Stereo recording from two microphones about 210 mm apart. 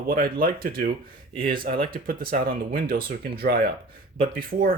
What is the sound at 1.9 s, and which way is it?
Speech, 45° right (ahead or behind).